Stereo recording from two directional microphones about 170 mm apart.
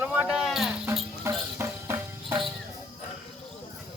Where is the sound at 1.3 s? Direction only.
15° right (ahead or behind).